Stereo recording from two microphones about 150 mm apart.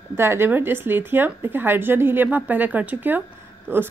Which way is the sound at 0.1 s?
15° right (ahead or behind).